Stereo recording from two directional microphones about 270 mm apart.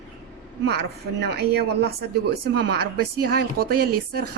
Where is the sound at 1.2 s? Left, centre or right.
Right.